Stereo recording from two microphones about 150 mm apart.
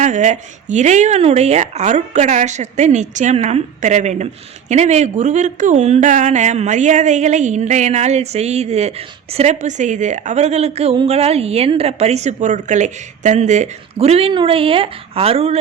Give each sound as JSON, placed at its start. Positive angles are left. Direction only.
{"t": 0.0, "sound": "speech", "side_deg": -55}